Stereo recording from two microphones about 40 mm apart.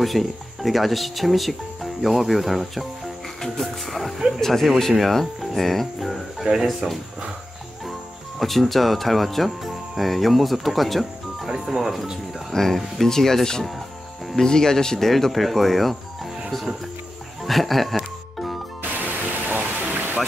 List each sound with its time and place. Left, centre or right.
0.0 s speech: centre
3.3 s music: centre
4.4 s speech: centre
6.4 s speech: centre
8.4 s speech: centre
11.4 s speech: centre
12.5 s speech: centre
18.8 s music: right